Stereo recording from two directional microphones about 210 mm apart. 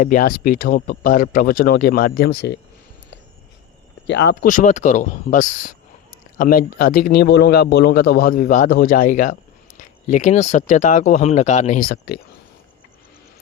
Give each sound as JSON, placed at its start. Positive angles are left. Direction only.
{"t": 0.0, "sound": "speech", "side_deg": 40}
{"t": 4.0, "sound": "speech", "side_deg": 55}
{"t": 4.4, "sound": "speech", "side_deg": 35}